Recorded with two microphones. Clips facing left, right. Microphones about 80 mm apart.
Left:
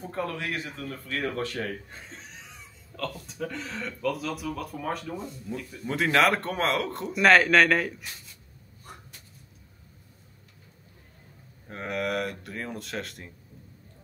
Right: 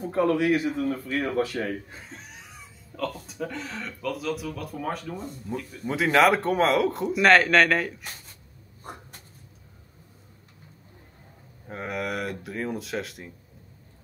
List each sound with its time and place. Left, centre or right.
0.0 s a man's voice: centre
8.0 s speech: right
11.6 s a man's voice: centre